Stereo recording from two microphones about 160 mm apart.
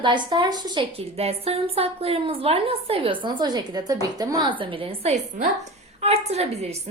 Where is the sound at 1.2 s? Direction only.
40° right (ahead or behind).